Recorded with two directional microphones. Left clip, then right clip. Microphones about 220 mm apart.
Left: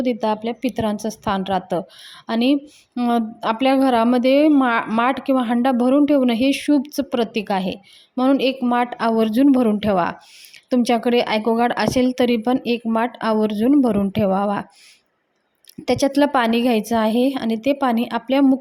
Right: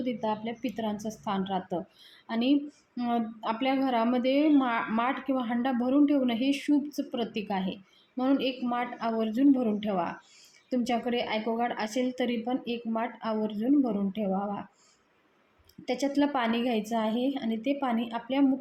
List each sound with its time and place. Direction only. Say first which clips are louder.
0.0 s speech: left 11 dB; 45° left (ahead or behind)
15.8 s speech: left 11 dB; 45° left (ahead or behind)